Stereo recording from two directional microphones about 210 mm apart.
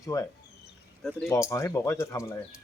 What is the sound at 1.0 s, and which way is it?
Speech, 5° left (ahead or behind).